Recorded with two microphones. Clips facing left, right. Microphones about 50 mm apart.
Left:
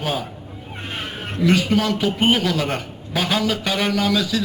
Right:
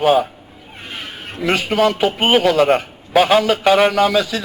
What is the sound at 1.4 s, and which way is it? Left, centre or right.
Speech, right.